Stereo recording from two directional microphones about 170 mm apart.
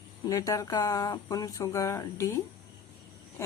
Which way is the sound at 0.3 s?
20° left (ahead or behind).